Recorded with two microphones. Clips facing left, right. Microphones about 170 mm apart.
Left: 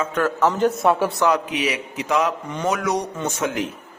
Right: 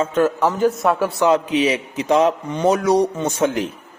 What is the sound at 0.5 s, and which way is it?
Speech, centre (ahead or behind).